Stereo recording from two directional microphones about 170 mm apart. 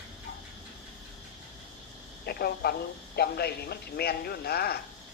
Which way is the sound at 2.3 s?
65° left (ahead or behind).